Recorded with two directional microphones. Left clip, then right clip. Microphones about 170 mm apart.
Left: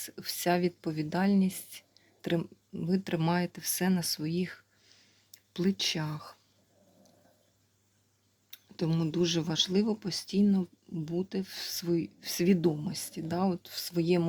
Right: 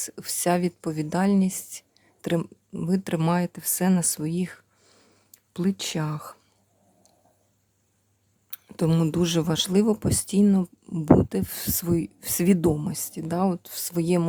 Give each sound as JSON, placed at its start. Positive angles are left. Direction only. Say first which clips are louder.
{"t": 0.0, "sound": "speech", "louder": "right 5 dB", "side_deg": -25}
{"t": 8.4, "sound": "speech", "louder": "right 8 dB", "side_deg": -40}